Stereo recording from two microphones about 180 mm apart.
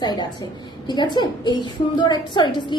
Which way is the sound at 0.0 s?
25° left (ahead or behind).